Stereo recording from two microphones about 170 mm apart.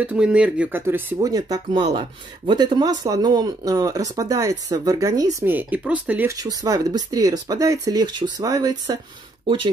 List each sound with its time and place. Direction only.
0.0 s speech: 5° right (ahead or behind)
6.3 s speech: 20° right (ahead or behind)